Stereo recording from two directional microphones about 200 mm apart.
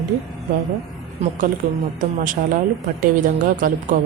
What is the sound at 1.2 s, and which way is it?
A woman's voice, 35° right (ahead or behind).